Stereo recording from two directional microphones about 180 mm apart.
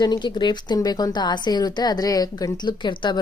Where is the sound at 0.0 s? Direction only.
25° left (ahead or behind).